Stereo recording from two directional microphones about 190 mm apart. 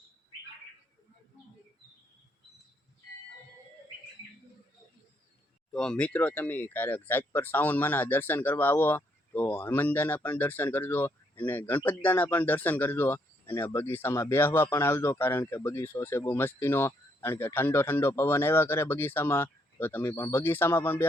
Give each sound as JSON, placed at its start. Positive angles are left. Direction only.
{"t": 5.7, "sound": "speech", "side_deg": 5}